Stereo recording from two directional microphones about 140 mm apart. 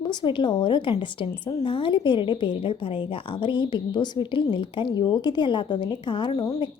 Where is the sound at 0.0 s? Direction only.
35° left (ahead or behind).